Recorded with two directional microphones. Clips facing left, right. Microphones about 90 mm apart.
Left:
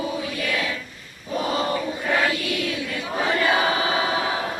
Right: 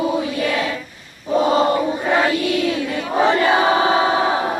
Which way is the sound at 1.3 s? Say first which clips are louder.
Right 8 dB; 30° right (ahead or behind).